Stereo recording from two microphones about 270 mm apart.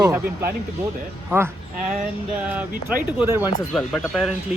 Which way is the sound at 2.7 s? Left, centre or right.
Right.